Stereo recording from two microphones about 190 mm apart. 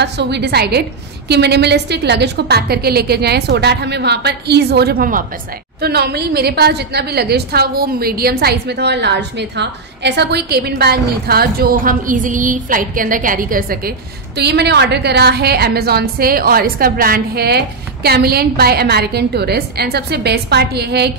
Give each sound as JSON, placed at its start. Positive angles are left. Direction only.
{"t": 0.0, "sound": "a woman's voice", "side_deg": -60}